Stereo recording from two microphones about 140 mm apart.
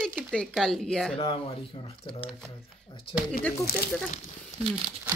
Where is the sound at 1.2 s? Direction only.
40° left (ahead or behind).